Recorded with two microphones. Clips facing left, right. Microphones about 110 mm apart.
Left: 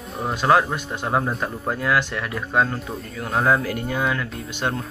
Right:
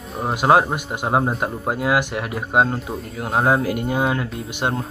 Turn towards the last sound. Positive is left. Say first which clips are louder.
# right 2 dB
turn(degrees=-15)  # may be behind; listen again after turning